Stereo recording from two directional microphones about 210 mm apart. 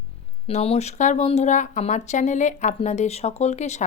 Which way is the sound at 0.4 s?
30° left (ahead or behind).